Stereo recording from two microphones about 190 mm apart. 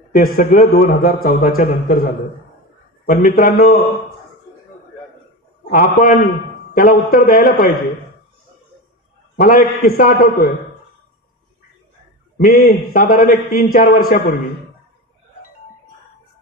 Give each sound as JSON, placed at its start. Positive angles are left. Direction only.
{"t": 0.1, "sound": "a man's voice", "side_deg": 45}
{"t": 3.1, "sound": "a man's voice", "side_deg": 45}
{"t": 5.7, "sound": "a man's voice", "side_deg": 45}
{"t": 9.4, "sound": "a man's voice", "side_deg": 50}
{"t": 12.4, "sound": "a man's voice", "side_deg": 50}